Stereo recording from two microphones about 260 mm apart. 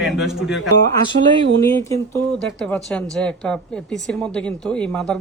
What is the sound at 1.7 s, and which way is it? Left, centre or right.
Speech, centre.